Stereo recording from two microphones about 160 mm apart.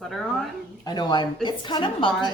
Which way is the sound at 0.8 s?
25° left (ahead or behind).